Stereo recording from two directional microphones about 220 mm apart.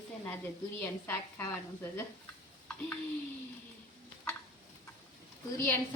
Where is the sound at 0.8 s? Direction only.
10° left (ahead or behind).